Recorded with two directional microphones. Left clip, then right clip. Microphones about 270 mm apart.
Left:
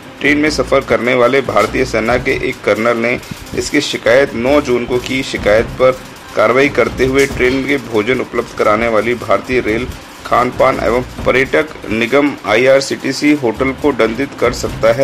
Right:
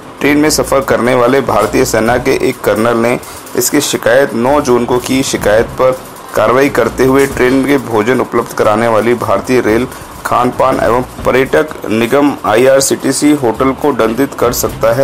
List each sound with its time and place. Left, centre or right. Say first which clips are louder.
0.2 s speech: right 3 dB; centre